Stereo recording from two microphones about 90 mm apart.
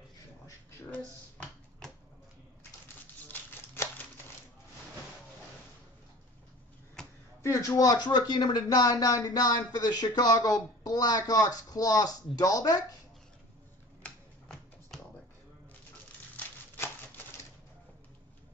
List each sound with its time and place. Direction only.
0.9 s finger snapping: 10° left (ahead or behind)
3.3 s a sound: 25° left (ahead or behind)
7.4 s speech: 35° left (ahead or behind)
16.3 s typewriter: 25° left (ahead or behind)